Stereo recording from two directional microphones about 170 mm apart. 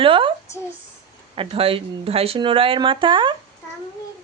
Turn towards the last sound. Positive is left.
turn(degrees=-30)  # may be behind; listen again after turning